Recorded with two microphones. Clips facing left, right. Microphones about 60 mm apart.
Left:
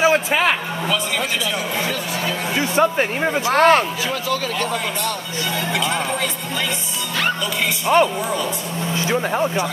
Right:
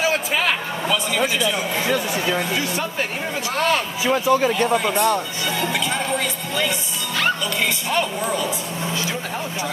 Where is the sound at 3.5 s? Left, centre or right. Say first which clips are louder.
Left 7 dB; left.